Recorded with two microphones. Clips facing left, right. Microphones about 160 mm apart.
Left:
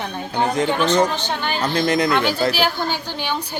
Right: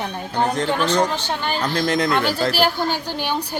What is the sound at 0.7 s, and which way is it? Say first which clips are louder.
Speech: left 2 dB; 5° right (ahead or behind).